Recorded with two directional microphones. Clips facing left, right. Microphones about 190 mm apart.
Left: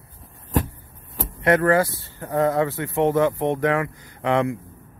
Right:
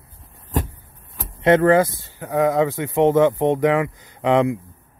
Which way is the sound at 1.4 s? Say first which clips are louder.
Right 4 dB; 20° right (ahead or behind).